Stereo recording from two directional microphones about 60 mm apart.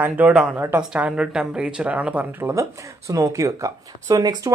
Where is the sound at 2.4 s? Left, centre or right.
Right.